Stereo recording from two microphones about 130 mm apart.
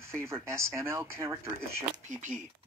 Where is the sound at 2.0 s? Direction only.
70° right (ahead or behind).